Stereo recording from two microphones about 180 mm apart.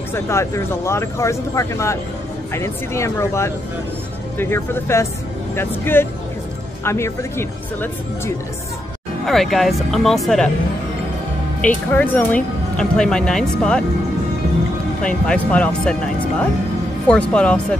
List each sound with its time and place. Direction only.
0.1 s speech: 15° left (ahead or behind)
9.2 s speech: centre (ahead or behind)
11.6 s speech: 10° left (ahead or behind)
15.0 s speech: 5° left (ahead or behind)